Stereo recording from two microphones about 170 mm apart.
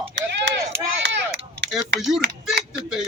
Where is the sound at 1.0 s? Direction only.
90° right.